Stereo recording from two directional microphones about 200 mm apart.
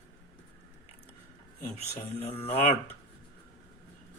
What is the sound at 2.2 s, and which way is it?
Speech, 30° left (ahead or behind).